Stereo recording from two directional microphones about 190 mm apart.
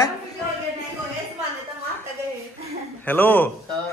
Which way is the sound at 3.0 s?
10° left (ahead or behind).